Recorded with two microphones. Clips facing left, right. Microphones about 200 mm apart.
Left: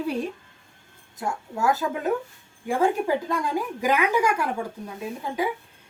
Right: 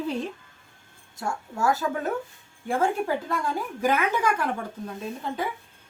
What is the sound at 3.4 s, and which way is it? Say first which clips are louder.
Speech: left 1 dB; 15° left (ahead or behind).